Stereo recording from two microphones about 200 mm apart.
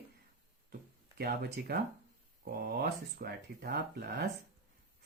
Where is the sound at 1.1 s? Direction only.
55° right (ahead or behind).